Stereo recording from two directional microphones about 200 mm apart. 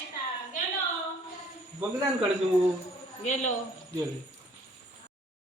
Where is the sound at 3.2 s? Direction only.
35° left (ahead or behind).